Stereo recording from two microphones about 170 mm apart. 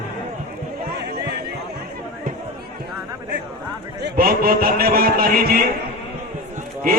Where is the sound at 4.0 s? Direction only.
70° right (ahead or behind).